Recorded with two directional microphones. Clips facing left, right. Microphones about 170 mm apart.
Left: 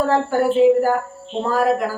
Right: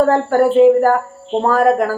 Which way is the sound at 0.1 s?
50° right (ahead or behind).